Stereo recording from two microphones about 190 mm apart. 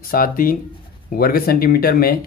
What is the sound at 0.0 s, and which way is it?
Speech, 50° left (ahead or behind).